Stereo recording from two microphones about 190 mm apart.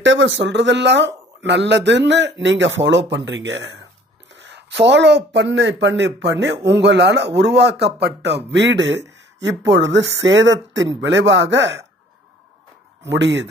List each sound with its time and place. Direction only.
0.0 s speech: 75° right (ahead or behind)
13.0 s speech: 70° right (ahead or behind)